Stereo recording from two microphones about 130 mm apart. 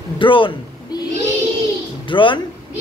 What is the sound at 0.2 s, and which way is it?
Speech, 40° left (ahead or behind).